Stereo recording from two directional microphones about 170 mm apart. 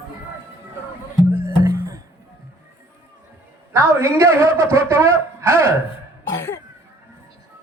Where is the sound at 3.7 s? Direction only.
15° right (ahead or behind).